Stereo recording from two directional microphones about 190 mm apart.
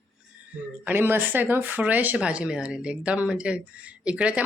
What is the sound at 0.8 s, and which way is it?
Speech, 10° right (ahead or behind).